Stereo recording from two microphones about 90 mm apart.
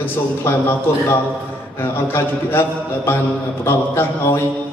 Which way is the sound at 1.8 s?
25° left (ahead or behind).